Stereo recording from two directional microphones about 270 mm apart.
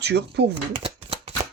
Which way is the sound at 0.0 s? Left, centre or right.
Right.